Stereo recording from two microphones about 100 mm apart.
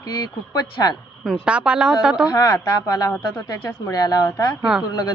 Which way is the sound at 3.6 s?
40° left (ahead or behind).